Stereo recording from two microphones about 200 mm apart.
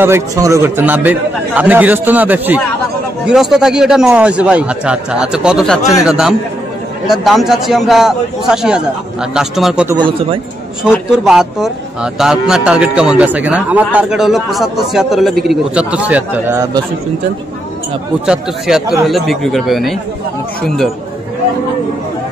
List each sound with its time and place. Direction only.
0.0 s a man's voice: 15° right (ahead or behind)
9.8 s speech: 25° right (ahead or behind)
10.8 s a man's voice: 5° right (ahead or behind)
18.2 s a man's voice: 5° right (ahead or behind)